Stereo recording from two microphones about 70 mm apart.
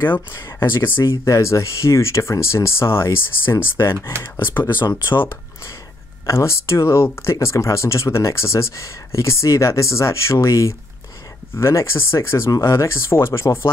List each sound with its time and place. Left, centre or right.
0.3 s speech: left
1.0 s speech: left